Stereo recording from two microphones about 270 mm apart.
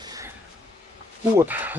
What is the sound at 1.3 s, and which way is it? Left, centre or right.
Speech, centre.